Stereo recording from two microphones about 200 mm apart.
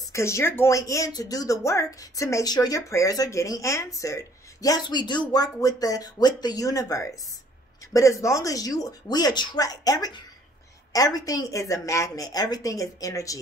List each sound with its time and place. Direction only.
0.1 s speech: 15° left (ahead or behind)